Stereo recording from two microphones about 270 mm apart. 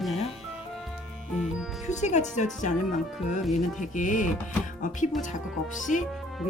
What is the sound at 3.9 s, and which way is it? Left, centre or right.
Speech, left.